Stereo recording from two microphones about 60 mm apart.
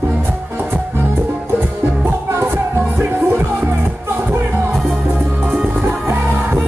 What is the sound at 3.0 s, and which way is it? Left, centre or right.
Music, right.